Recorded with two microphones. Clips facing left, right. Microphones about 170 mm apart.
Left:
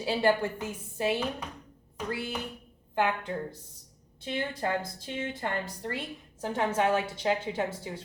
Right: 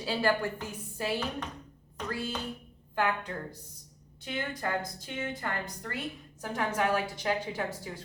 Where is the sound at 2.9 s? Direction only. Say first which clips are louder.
Left 2 dB; 20° left (ahead or behind).